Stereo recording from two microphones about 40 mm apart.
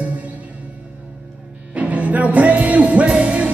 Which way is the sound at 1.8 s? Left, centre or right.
Right.